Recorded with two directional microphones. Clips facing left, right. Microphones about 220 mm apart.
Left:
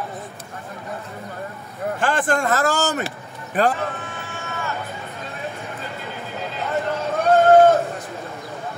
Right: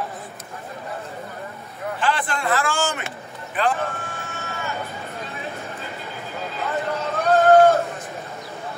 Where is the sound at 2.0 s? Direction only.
45° left (ahead or behind).